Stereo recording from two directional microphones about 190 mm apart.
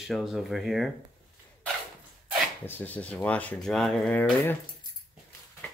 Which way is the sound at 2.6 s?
10° left (ahead or behind).